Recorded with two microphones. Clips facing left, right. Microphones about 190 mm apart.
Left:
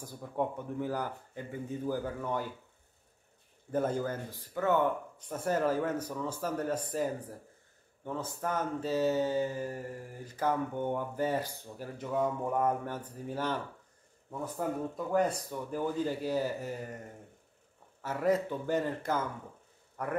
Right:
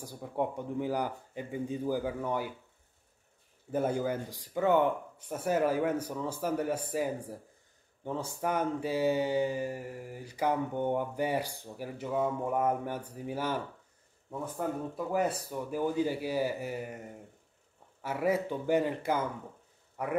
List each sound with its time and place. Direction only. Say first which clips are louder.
0.0 s mantra: right 1 dB; 15° right (ahead or behind)
3.7 s mantra: right 1 dB; 10° right (ahead or behind)
8.2 s mantra: right 3 dB; 10° right (ahead or behind)
15.1 s mantra: left 2 dB; 10° right (ahead or behind)
18.0 s mantra: even; 10° right (ahead or behind)